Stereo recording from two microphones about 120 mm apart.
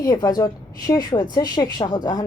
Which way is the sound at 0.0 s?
30° left (ahead or behind).